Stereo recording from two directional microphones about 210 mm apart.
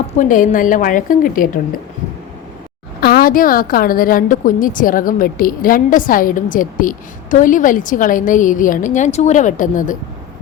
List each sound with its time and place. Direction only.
0.2 s a woman's voice: 40° left (ahead or behind)
3.0 s a woman's voice: 45° left (ahead or behind)